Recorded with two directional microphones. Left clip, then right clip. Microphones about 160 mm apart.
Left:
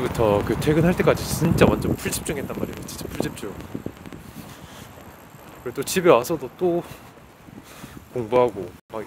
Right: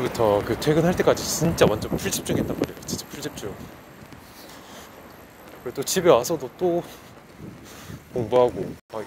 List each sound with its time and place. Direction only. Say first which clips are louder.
0.0 s speech: even; 30° left (ahead or behind)
5.7 s speech: left 1 dB; 35° left (ahead or behind)
8.3 s speech: even; 30° left (ahead or behind)